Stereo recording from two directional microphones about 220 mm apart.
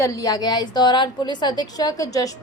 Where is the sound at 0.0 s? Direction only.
15° left (ahead or behind).